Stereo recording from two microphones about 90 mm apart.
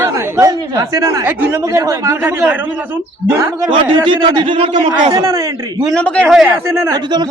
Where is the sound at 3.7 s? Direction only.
70° right (ahead or behind); by 4.9 s 90° right.